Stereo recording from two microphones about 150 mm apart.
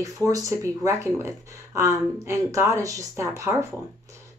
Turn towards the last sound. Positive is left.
turn(degrees=-20)  # may be behind; listen again after turning